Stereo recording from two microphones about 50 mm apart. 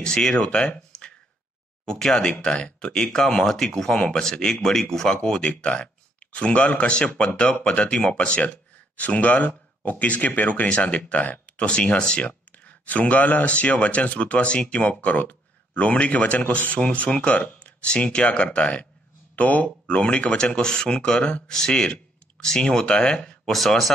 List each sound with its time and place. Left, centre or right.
0.0 s speech: centre
12.3 s speech: left
23.5 s speech: centre